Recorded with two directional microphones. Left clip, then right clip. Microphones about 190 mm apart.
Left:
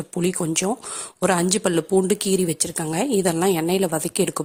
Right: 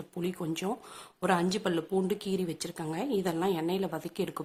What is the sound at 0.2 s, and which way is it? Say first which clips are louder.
Speech: left 11 dB; 40° left (ahead or behind).